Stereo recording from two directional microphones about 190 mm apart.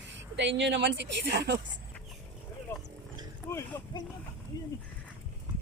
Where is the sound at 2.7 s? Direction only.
10° left (ahead or behind).